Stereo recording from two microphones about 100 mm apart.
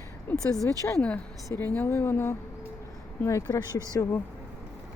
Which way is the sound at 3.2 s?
35° left (ahead or behind).